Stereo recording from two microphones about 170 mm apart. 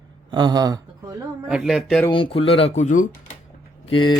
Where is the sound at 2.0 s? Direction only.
30° left (ahead or behind); by 3.1 s 45° left (ahead or behind).